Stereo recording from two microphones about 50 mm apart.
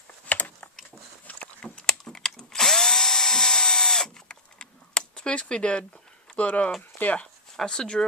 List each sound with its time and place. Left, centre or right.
0.3 s typing: left
1.6 s drill: centre
6.3 s speech: left
7.5 s speech: centre